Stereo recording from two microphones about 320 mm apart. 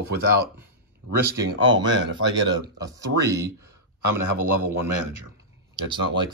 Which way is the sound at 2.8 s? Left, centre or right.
Centre.